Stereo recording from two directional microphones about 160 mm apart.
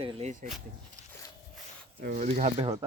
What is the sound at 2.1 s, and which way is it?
Speech, 50° right (ahead or behind).